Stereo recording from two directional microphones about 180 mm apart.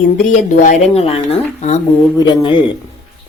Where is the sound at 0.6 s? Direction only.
40° left (ahead or behind).